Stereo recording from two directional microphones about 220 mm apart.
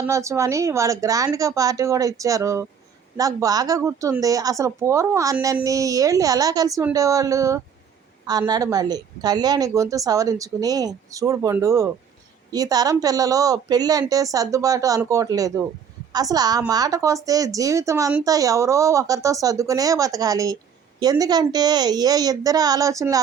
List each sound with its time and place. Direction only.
0.1 s a woman's voice: 15° right (ahead or behind)